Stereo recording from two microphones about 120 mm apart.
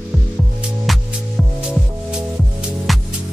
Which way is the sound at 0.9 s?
Centre (ahead or behind).